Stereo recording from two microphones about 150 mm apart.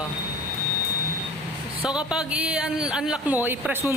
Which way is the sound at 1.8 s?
5° right (ahead or behind).